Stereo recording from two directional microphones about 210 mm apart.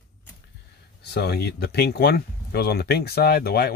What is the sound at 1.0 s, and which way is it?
Speech, 50° left (ahead or behind).